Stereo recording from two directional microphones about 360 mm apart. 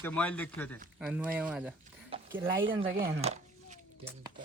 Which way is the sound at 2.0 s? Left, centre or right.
Centre.